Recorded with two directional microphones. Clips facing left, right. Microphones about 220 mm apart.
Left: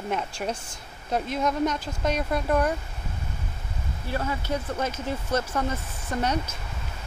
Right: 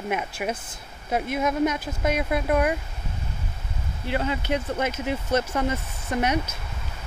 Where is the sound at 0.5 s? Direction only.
20° right (ahead or behind).